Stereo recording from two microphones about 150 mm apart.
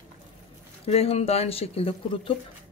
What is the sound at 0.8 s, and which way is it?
Speech, 45° left (ahead or behind).